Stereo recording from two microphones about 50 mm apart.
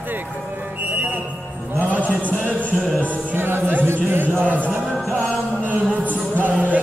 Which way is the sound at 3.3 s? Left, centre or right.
Right.